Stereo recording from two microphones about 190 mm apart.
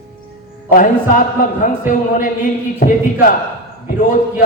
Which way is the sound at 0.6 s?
45° left (ahead or behind).